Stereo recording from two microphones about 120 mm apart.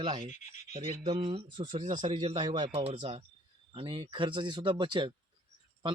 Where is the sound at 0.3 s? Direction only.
90° left.